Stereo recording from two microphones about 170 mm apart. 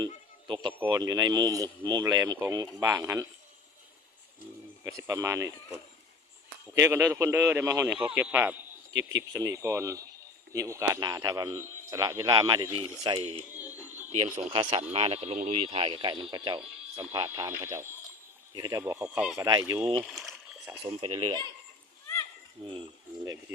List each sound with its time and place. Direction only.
0.4 s a man's voice: 25° right (ahead or behind)
4.8 s speech: 15° right (ahead or behind)
6.7 s a man's voice: 15° right (ahead or behind)
13.5 s a sound: 10° right (ahead or behind)
14.5 s a man's voice: 30° right (ahead or behind)
17.2 s speech: 15° right (ahead or behind)
19.5 s a man's voice: 20° right (ahead or behind)
20.1 s a sound: centre (ahead or behind)
20.9 s speech: 35° right (ahead or behind)
23.2 s a man's voice: 20° right (ahead or behind)